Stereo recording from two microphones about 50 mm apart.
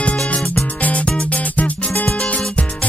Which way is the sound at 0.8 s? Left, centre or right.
Left.